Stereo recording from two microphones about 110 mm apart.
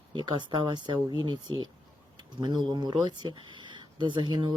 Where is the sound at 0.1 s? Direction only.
45° right (ahead or behind).